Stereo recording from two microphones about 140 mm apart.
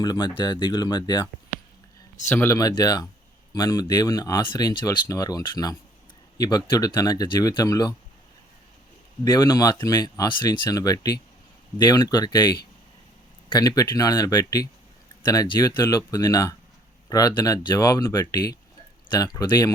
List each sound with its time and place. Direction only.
0.0 s speech: 30° left (ahead or behind)
2.3 s speech: 15° left (ahead or behind)
2.6 s speech: 30° left (ahead or behind)
9.2 s speech: 25° left (ahead or behind)
13.6 s speech: 25° left (ahead or behind)